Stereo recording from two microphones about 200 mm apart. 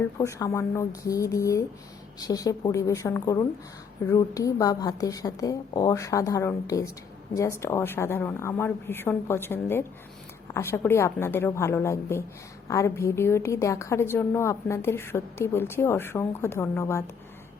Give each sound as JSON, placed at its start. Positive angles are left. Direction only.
{"t": 0.0, "sound": "a woman's voice", "side_deg": 15}